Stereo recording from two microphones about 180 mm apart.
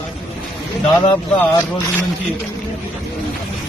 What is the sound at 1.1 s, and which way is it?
Speech, 20° left (ahead or behind).